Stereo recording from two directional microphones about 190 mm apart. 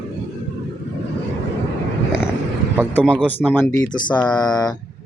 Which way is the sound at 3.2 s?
5° left (ahead or behind).